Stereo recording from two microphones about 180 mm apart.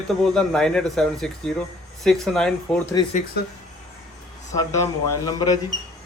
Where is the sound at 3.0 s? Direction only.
20° left (ahead or behind).